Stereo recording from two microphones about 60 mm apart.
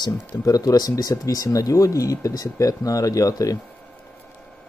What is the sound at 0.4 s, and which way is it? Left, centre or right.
Speech, left.